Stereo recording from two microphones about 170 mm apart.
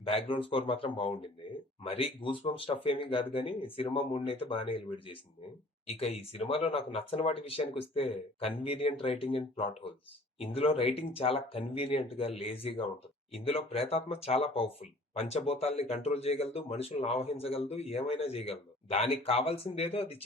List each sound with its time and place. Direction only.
0.0 s speech: 35° left (ahead or behind)